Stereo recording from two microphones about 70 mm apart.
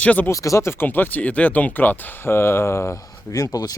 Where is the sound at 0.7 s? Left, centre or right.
Left.